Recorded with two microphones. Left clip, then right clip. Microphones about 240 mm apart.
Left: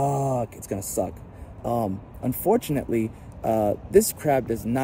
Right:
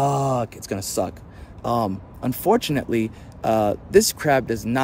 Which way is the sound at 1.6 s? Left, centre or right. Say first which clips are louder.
Right 4 dB; right.